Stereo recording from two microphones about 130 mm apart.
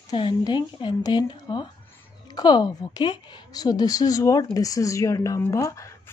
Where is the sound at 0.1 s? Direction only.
35° left (ahead or behind).